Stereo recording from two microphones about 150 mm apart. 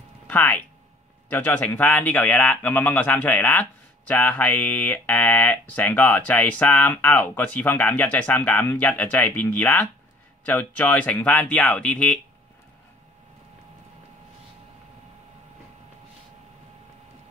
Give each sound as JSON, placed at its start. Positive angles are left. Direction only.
{"t": 0.3, "sound": "a man's voice", "side_deg": 10}